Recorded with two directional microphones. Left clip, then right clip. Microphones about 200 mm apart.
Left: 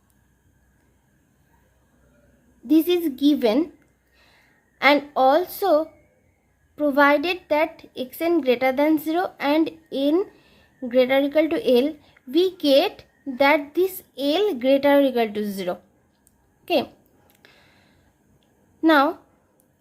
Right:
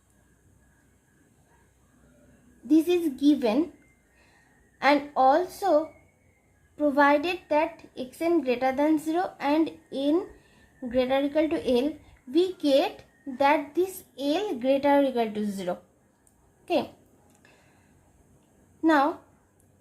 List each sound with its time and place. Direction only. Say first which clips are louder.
2.6 s speech: left 3 dB; 35° left (ahead or behind)
4.8 s speech: left 4 dB; 35° left (ahead or behind)
18.8 s a woman's voice: left 5 dB; 35° left (ahead or behind)